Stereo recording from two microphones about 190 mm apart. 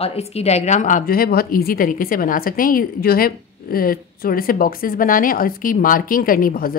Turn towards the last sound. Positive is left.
turn(degrees=50)  # may be behind; listen again after turning